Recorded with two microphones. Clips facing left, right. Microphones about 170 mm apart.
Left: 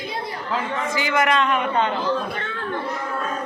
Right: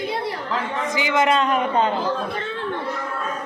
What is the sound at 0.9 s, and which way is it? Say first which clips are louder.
A man's voice: right 2 dB; 20° right (ahead or behind).